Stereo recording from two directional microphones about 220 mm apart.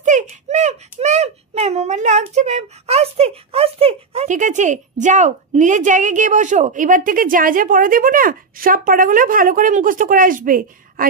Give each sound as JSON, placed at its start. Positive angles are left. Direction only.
{"t": 0.0, "sound": "a child's voice", "side_deg": -35}